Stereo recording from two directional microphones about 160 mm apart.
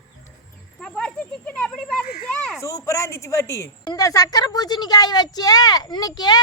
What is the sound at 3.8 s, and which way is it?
Speech, 25° left (ahead or behind).